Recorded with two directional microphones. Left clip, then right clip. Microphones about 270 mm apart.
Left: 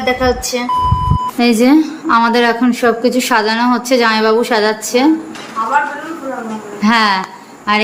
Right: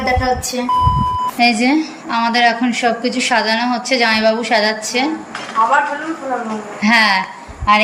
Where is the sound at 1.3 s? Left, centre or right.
Centre.